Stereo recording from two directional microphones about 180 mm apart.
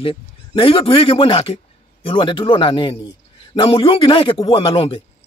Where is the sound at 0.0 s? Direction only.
30° left (ahead or behind).